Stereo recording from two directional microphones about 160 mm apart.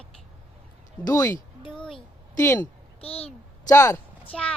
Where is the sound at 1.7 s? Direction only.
5° left (ahead or behind).